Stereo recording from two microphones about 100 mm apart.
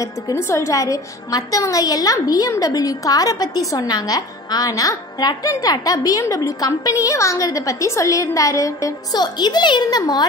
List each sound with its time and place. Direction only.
0.0 s a woman's voice: 30° left (ahead or behind)